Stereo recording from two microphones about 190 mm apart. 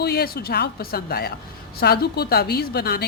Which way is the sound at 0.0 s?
55° left (ahead or behind).